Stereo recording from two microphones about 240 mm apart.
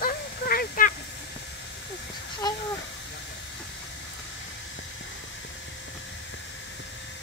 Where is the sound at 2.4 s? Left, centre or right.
Centre.